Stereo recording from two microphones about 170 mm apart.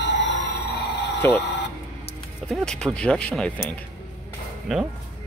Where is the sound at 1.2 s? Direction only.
15° left (ahead or behind).